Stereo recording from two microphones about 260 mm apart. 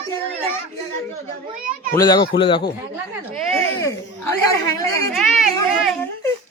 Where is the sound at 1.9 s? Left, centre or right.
Centre.